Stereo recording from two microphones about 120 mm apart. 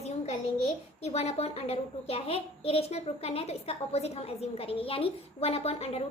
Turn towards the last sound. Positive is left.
turn(degrees=60)  # may be behind; listen again after turning